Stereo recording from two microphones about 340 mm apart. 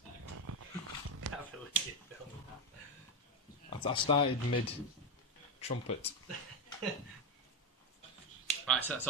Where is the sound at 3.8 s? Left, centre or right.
Centre.